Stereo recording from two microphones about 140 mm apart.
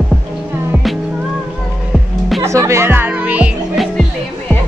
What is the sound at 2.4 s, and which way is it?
Music, 20° right (ahead or behind).